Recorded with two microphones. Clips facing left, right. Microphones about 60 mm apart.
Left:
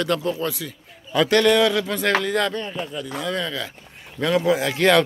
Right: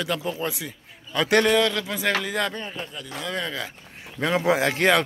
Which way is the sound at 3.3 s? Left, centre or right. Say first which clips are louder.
Even; centre.